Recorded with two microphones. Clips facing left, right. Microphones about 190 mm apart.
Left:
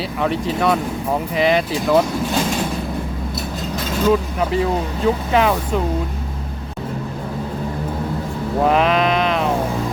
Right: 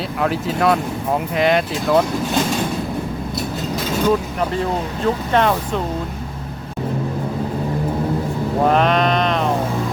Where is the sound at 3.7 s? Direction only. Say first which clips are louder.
Left 1 dB; centre (ahead or behind).